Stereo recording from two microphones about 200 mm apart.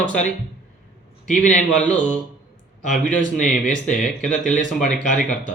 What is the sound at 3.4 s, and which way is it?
Speech, 40° left (ahead or behind).